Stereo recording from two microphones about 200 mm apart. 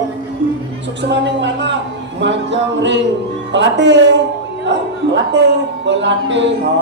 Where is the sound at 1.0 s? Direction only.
60° right (ahead or behind).